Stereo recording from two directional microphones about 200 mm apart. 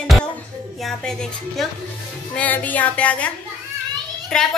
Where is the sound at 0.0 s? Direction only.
5° left (ahead or behind).